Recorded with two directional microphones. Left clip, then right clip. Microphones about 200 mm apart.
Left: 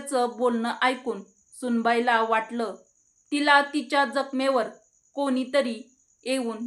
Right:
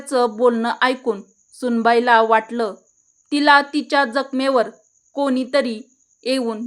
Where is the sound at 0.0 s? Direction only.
45° right (ahead or behind).